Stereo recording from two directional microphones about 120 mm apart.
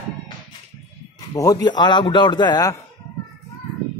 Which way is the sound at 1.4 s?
30° left (ahead or behind).